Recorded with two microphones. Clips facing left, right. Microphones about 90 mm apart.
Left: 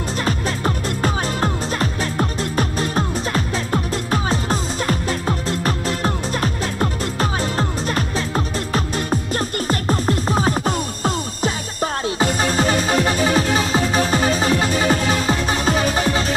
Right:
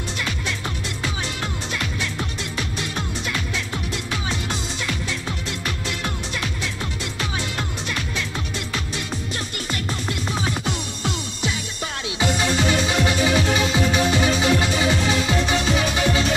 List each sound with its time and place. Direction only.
0.2 s music: 40° left (ahead or behind)